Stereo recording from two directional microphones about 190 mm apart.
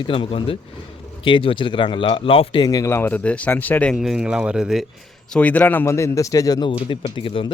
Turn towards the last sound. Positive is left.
turn(degrees=30)  # may be behind; listen again after turning